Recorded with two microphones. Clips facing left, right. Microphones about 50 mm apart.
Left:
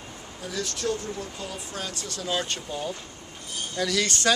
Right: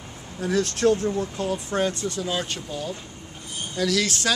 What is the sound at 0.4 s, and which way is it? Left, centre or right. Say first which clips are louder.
Speech: right 9 dB; right.